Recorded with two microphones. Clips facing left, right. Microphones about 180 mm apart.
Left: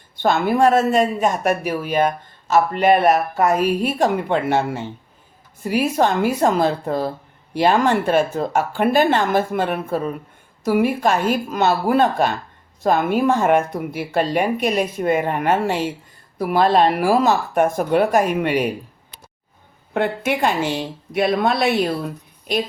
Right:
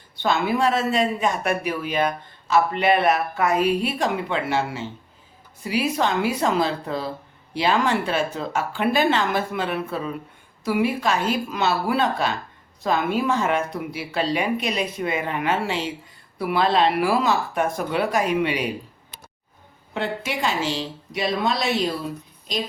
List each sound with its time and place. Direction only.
0.2 s speech: 50° left (ahead or behind)
19.9 s a woman's voice: 55° left (ahead or behind)